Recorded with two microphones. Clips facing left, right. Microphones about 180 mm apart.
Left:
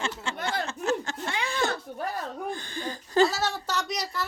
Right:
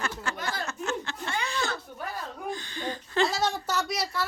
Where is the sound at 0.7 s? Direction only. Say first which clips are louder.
Left 4 dB; 40° left (ahead or behind).